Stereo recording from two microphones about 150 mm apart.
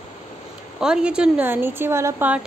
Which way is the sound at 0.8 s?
5° right (ahead or behind).